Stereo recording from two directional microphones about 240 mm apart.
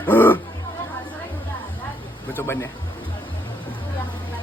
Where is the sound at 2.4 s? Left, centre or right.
Centre.